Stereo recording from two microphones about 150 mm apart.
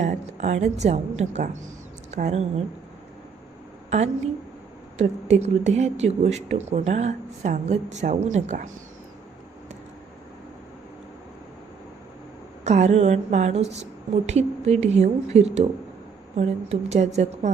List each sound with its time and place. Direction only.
0.0 s a woman's voice: 50° right (ahead or behind)
3.8 s a woman's voice: 50° right (ahead or behind)
12.6 s speech: 50° right (ahead or behind)